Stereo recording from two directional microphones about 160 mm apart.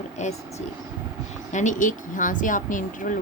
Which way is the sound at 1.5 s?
50° left (ahead or behind).